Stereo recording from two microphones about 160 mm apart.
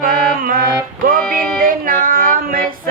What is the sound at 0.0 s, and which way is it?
Music, 60° right (ahead or behind).